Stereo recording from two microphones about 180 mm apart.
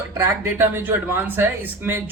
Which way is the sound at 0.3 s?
10° right (ahead or behind).